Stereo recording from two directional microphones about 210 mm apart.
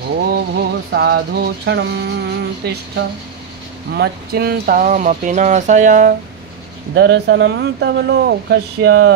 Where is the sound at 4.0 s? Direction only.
45° right (ahead or behind).